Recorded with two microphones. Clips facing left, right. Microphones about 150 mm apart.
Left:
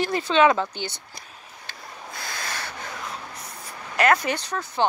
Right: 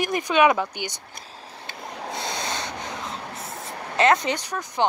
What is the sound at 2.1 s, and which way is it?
Snort, 25° right (ahead or behind).